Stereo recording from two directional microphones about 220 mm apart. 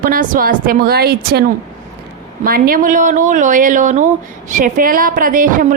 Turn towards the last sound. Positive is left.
turn(degrees=-40)  # may be behind; listen again after turning